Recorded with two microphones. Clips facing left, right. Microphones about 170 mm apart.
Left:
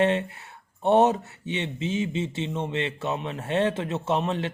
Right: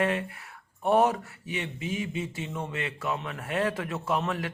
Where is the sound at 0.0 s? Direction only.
25° left (ahead or behind).